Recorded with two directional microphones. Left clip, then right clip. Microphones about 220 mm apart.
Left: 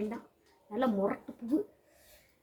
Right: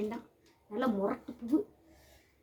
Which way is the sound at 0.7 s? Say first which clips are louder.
Left 2 dB; centre (ahead or behind).